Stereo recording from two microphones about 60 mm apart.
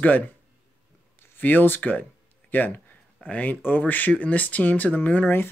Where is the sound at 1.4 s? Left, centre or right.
Left.